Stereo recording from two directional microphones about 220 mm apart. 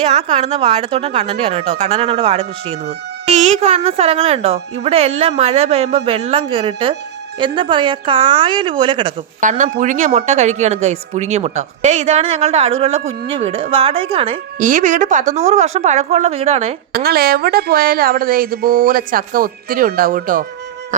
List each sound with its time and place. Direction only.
0.0 s speech: 30° right (ahead or behind)
9.4 s speech: 35° right (ahead or behind)
14.6 s speech: 35° right (ahead or behind)
16.9 s speech: 45° right (ahead or behind)